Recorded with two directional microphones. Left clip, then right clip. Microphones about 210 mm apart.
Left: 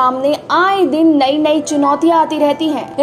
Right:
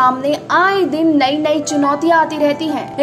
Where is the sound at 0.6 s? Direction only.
30° right (ahead or behind).